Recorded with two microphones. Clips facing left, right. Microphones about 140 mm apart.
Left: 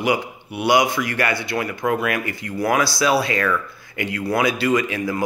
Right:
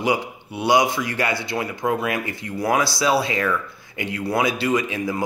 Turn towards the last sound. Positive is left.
turn(degrees=-20)  # may be behind; listen again after turning